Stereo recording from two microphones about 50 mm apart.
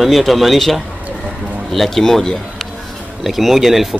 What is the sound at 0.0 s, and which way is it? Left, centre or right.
Speech, centre.